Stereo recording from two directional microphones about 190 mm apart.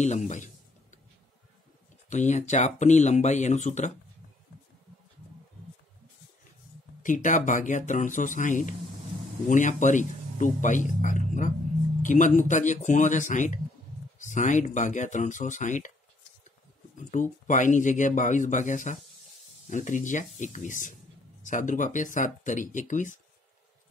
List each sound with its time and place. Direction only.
0.0 s speech: 40° left (ahead or behind)
2.0 s speech: 40° left (ahead or behind)
7.0 s speech: 45° left (ahead or behind)
17.0 s speech: 40° left (ahead or behind)